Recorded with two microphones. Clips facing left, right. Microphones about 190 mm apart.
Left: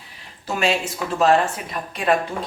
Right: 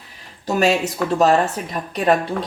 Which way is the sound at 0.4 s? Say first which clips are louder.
Right 4 dB; 40° right (ahead or behind).